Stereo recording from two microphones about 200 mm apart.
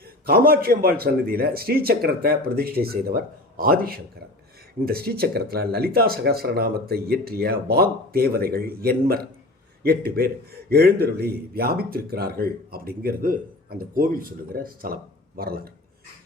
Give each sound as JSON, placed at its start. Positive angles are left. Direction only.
{"t": 0.3, "sound": "a man's voice", "side_deg": -50}